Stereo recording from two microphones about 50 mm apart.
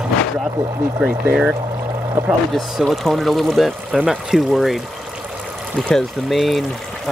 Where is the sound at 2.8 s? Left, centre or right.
Centre.